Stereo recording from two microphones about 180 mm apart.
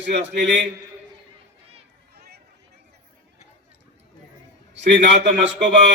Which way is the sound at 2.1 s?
60° right (ahead or behind).